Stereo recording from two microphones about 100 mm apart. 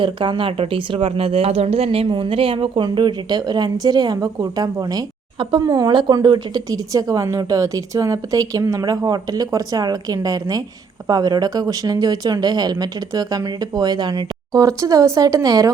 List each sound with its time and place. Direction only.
0.0 s speech: 55° right (ahead or behind); by 15.7 s 35° right (ahead or behind)